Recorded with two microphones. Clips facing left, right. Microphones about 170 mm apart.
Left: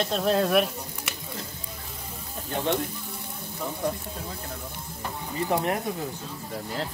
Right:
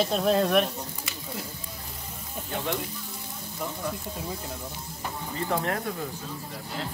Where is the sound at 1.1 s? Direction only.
65° left (ahead or behind).